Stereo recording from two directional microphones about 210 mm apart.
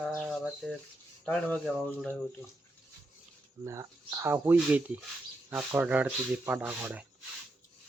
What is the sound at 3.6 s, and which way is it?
Speech, 15° right (ahead or behind).